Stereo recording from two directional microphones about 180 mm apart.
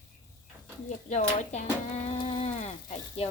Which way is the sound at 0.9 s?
40° left (ahead or behind).